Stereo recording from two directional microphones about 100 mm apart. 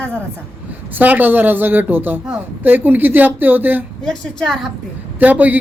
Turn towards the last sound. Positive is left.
turn(degrees=-15)  # may be behind; listen again after turning